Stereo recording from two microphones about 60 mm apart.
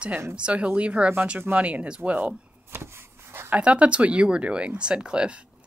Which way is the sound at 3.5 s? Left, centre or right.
Centre.